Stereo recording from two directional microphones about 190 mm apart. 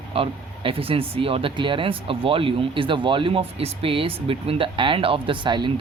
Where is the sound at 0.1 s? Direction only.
30° right (ahead or behind).